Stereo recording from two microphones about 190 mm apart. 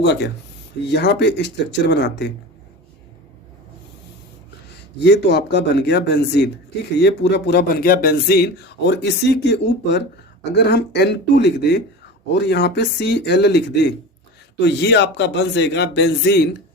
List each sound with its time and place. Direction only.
0.0 s speech: 65° left (ahead or behind)
4.9 s speech: 60° left (ahead or behind)